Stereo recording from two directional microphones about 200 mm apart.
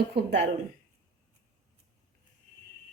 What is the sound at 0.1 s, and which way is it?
Speech, 55° right (ahead or behind).